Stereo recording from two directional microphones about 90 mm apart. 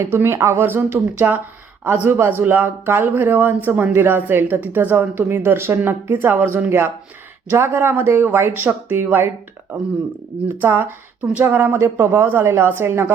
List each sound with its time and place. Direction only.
0.0 s a woman's voice: 25° right (ahead or behind)
10.5 s a woman's voice: 20° right (ahead or behind)